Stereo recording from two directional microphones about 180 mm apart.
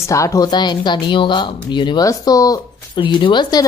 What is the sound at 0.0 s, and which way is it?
Speech, 15° left (ahead or behind).